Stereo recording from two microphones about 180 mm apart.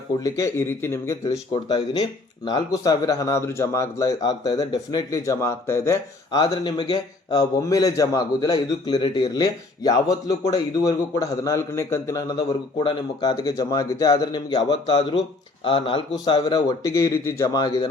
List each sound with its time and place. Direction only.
0.2 s speech: 15° left (ahead or behind)
1.5 s speech: 25° left (ahead or behind)